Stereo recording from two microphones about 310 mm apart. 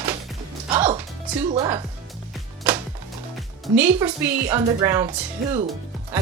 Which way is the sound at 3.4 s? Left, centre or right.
Centre.